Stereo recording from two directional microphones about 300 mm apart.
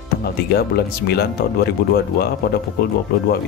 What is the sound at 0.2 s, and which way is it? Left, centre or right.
Speech, left.